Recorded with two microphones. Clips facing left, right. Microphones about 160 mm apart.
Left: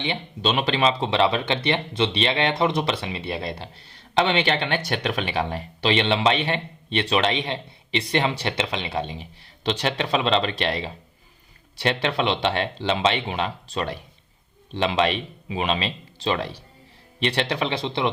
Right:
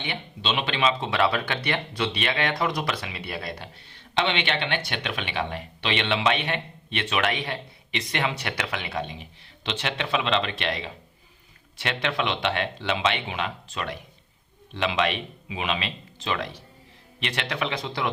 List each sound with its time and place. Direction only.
0.4 s speech: 40° left (ahead or behind); by 18.1 s 25° left (ahead or behind)